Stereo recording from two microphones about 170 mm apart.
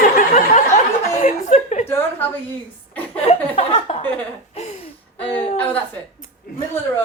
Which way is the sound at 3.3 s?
35° left (ahead or behind).